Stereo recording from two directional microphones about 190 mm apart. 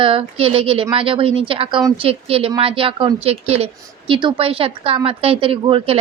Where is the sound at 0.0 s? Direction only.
30° right (ahead or behind).